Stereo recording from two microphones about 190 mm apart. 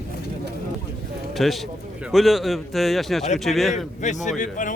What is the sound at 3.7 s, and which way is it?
A man's voice, 40° left (ahead or behind).